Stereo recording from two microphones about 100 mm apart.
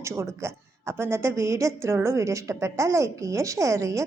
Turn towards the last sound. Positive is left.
turn(degrees=-30)  # may be behind; listen again after turning